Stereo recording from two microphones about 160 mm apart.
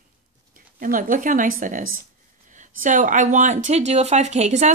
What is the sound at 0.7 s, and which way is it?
Speech, 60° right (ahead or behind).